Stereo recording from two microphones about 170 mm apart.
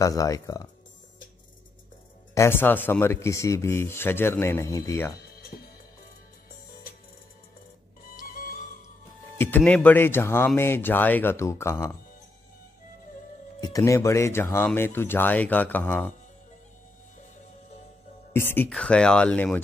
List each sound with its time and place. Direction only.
0.0 s speech: 20° left (ahead or behind)
2.3 s speech: 15° left (ahead or behind)
8.2 s music: 55° left (ahead or behind)
9.4 s speech: 10° left (ahead or behind)
13.6 s speech: 20° left (ahead or behind)
18.3 s speech: 10° left (ahead or behind)